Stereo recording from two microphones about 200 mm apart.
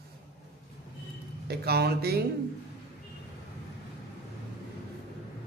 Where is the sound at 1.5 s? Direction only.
55° right (ahead or behind).